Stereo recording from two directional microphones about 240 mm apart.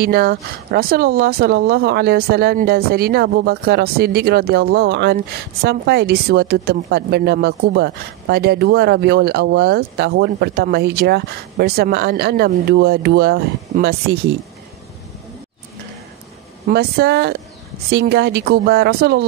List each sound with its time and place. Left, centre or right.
0.0 s speech: right
16.6 s speech: right